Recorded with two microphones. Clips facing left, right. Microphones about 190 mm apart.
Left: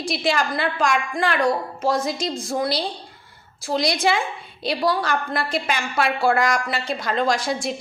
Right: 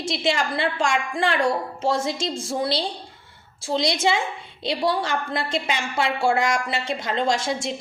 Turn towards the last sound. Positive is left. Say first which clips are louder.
# left 1 dB
turn(degrees=-25)  # may be behind; listen again after turning